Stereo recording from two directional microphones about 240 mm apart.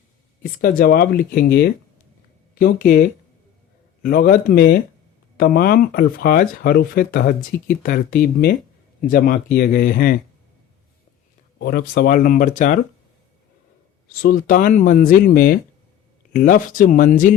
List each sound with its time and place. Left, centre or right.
0.8 s speech: left
11.6 s speech: left
14.1 s speech: left